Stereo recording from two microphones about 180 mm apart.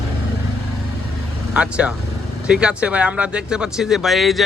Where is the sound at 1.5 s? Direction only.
5° right (ahead or behind).